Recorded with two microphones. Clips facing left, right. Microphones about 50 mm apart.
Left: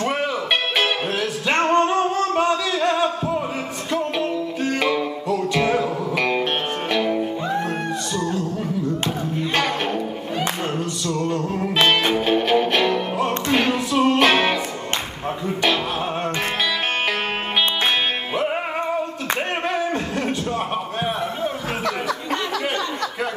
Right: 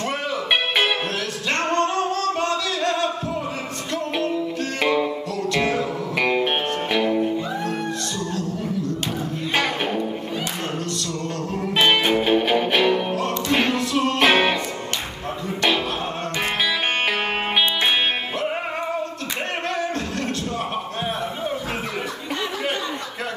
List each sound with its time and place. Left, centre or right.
1.5 s music: centre
6.1 s music: centre
11.9 s music: centre
13.7 s music: centre
14.2 s music: centre